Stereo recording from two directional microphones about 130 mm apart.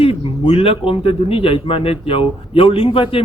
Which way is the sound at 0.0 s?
45° left (ahead or behind).